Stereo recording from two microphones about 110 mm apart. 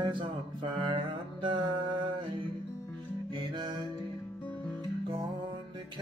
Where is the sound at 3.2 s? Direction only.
45° right (ahead or behind).